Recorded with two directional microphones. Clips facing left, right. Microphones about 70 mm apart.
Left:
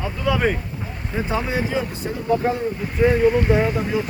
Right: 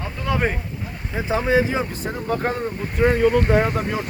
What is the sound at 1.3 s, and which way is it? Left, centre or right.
Speech, right.